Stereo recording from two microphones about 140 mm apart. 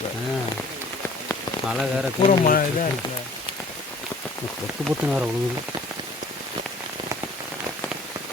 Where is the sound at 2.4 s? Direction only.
75° left (ahead or behind).